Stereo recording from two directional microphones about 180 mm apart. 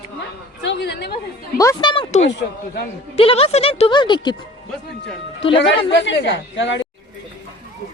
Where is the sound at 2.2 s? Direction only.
75° left (ahead or behind).